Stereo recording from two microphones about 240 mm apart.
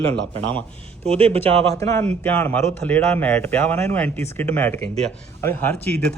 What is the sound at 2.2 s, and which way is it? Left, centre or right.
A man's voice, centre.